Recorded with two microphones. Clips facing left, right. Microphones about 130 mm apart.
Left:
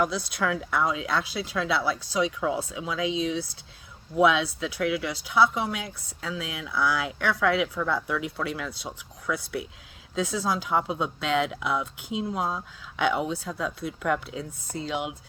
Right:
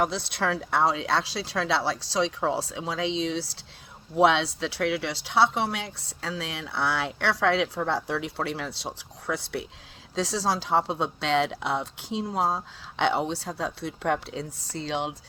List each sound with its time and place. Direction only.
0.1 s speech: 25° right (ahead or behind)